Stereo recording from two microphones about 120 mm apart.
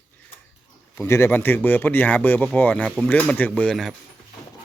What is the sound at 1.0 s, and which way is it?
Speech, 20° left (ahead or behind).